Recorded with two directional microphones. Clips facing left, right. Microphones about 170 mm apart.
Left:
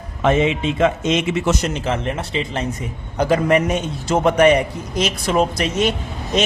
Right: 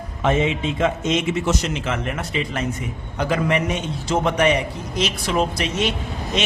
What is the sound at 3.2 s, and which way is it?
Speech, 40° left (ahead or behind).